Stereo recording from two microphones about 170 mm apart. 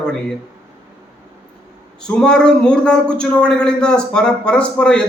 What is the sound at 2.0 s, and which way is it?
A man's voice, 5° left (ahead or behind).